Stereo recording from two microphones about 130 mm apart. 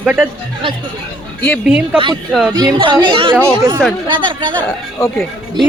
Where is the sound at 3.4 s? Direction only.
20° right (ahead or behind).